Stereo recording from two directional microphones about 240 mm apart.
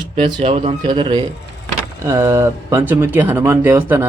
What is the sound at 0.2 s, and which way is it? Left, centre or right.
A man's voice, right.